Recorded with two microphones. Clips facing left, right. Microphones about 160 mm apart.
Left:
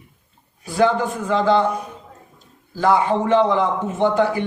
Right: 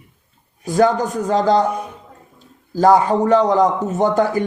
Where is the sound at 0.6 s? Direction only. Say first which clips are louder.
Right 2 dB; 45° right (ahead or behind).